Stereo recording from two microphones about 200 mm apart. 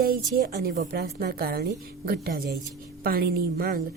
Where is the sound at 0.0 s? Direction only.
45° right (ahead or behind).